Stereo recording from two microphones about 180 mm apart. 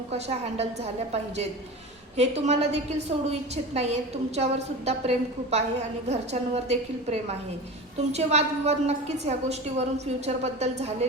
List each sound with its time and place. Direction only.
0.1 s a woman's voice: 35° right (ahead or behind)
2.1 s a woman's voice: 35° right (ahead or behind)